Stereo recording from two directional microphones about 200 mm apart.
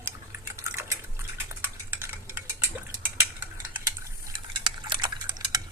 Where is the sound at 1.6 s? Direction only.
10° right (ahead or behind).